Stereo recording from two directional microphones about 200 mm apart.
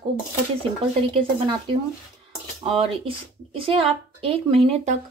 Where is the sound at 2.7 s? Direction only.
25° right (ahead or behind).